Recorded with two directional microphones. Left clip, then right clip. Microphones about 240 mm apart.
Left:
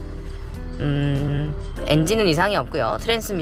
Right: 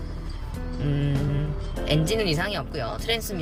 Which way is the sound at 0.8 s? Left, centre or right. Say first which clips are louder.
Left 5 dB; centre.